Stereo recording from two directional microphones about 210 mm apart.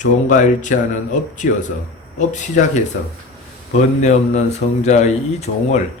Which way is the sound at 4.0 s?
35° left (ahead or behind).